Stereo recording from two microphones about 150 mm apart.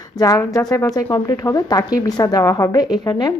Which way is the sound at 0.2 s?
25° left (ahead or behind).